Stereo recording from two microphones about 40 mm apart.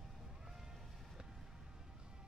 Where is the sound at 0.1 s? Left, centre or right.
Centre.